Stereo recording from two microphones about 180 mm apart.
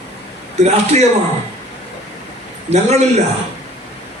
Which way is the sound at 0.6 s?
40° right (ahead or behind).